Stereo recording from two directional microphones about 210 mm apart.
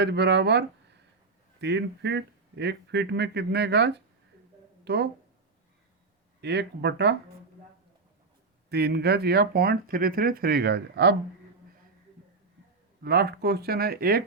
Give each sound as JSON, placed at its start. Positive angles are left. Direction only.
{"t": 0.0, "sound": "speech", "side_deg": -50}
{"t": 1.6, "sound": "speech", "side_deg": -55}
{"t": 6.4, "sound": "speech", "side_deg": -55}
{"t": 8.7, "sound": "speech", "side_deg": -50}
{"t": 13.0, "sound": "speech", "side_deg": -50}